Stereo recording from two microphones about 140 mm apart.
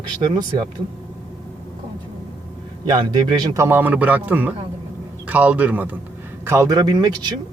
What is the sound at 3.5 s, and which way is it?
A man's voice, 15° right (ahead or behind).